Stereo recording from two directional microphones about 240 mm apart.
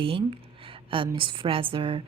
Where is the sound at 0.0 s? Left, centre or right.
Right.